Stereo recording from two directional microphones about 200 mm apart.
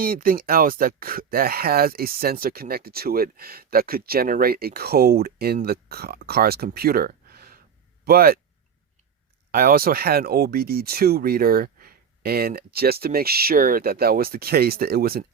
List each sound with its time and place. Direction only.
0.0 s speech: 45° right (ahead or behind)
9.5 s speech: 45° right (ahead or behind)